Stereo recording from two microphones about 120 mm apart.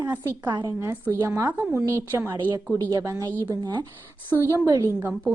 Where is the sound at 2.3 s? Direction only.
35° right (ahead or behind).